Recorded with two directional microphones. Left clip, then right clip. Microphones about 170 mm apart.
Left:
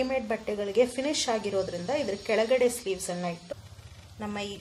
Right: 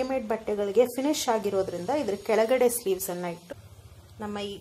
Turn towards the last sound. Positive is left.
turn(degrees=-15)  # may be behind; listen again after turning